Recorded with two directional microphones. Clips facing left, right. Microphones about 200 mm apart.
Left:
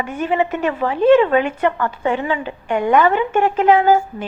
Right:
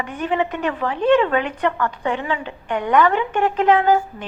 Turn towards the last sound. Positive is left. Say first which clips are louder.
# left 3 dB
turn(degrees=5)  # may be behind; listen again after turning